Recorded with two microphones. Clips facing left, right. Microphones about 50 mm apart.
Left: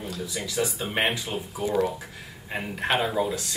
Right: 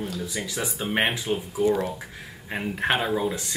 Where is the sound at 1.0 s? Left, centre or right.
Centre.